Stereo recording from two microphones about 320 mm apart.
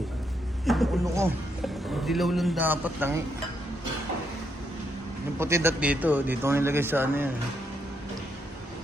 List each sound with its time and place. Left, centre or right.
0.6 s a man's voice: centre
5.4 s a man's voice: centre